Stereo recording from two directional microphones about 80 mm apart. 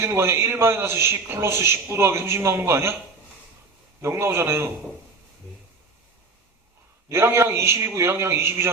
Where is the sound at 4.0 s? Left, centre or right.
Right.